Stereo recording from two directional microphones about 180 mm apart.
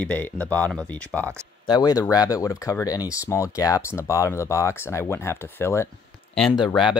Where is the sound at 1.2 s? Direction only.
15° right (ahead or behind).